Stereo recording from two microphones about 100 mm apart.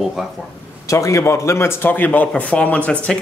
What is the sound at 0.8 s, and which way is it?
Speech, 30° left (ahead or behind).